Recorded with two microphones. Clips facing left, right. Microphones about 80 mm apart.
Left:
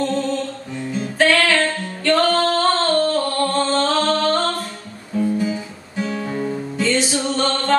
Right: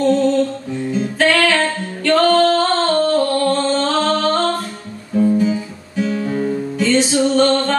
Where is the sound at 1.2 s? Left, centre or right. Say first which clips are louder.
Right 1 dB; right.